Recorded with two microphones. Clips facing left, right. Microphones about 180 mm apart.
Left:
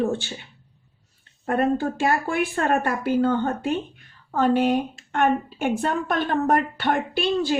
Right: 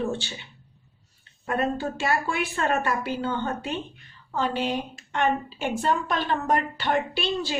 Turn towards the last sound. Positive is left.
turn(degrees=50)  # may be behind; listen again after turning